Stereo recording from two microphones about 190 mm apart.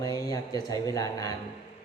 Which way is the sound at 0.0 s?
20° left (ahead or behind).